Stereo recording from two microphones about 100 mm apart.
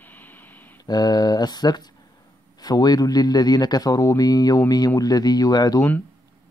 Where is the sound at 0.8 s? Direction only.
45° left (ahead or behind).